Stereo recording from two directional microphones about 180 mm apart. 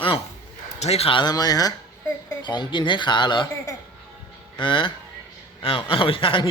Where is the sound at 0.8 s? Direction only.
35° left (ahead or behind).